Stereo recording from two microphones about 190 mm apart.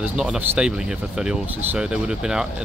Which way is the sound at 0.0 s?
5° right (ahead or behind).